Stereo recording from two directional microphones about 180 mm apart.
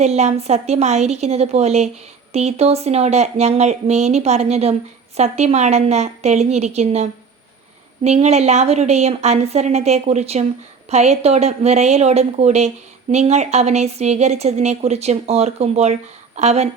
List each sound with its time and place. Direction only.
0.0 s a woman's voice: 35° right (ahead or behind)